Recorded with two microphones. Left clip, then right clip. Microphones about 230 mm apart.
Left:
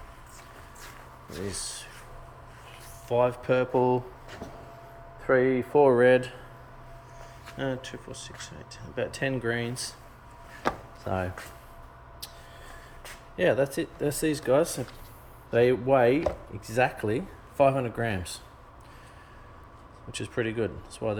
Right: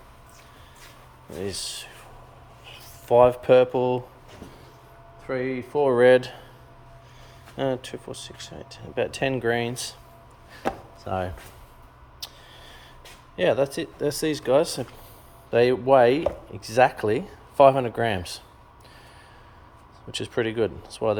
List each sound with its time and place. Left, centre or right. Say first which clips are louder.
1.3 s speech: right 5 dB; centre
3.1 s speech: right 8 dB; centre
3.7 s speech: even; centre
5.2 s speech: left 5 dB; centre
5.9 s speech: right 4 dB; centre
7.5 s speech: right 6 dB; centre
11.0 s speech: right 3 dB; centre
12.2 s mouse: right 6 dB; centre
13.3 s speech: right 2 dB; centre
20.1 s speech: right 4 dB; centre